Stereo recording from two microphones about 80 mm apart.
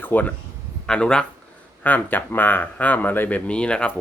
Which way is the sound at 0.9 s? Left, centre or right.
Centre.